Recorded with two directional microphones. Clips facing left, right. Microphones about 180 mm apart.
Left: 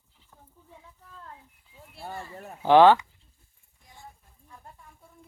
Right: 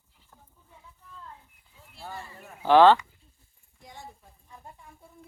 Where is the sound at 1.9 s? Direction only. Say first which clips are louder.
Left 3 dB; 50° left (ahead or behind).